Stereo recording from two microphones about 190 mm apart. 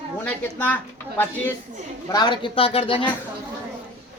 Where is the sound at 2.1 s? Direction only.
20° left (ahead or behind).